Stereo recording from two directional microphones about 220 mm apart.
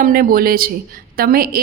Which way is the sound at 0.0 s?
40° right (ahead or behind).